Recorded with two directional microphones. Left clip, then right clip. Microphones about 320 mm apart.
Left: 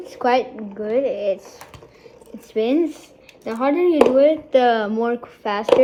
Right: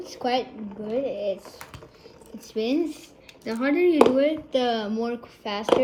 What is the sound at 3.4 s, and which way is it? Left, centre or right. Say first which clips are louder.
Speech: left 4 dB; left.